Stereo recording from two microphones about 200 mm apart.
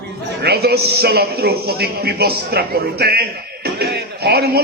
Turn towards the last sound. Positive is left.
turn(degrees=-55)  # may be behind; listen again after turning